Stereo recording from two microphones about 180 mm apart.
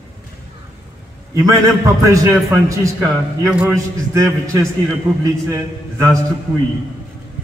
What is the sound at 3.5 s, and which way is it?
Speech, 5° right (ahead or behind).